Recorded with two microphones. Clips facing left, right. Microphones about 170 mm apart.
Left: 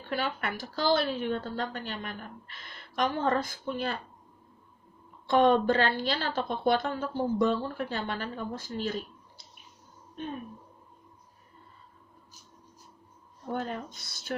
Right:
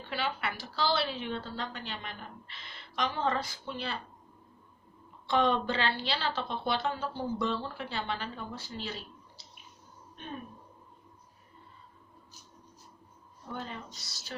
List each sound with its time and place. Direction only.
0.1 s a woman's voice: 45° left (ahead or behind)
5.2 s a woman's voice: 50° left (ahead or behind)
13.5 s a woman's voice: 50° left (ahead or behind)